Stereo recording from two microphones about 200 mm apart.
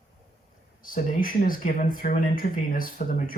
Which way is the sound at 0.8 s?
45° left (ahead or behind).